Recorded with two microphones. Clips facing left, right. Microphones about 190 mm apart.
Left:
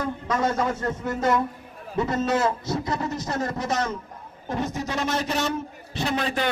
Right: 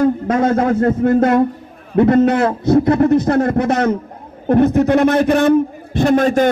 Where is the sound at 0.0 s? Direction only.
55° right (ahead or behind).